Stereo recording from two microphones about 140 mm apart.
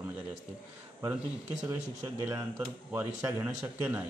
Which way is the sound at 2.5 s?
15° right (ahead or behind).